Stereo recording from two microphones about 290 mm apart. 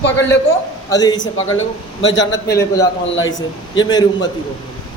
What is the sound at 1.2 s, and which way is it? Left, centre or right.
Speech, left.